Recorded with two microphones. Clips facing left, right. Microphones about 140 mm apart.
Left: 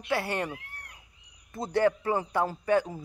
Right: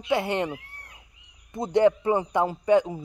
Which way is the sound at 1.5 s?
20° right (ahead or behind).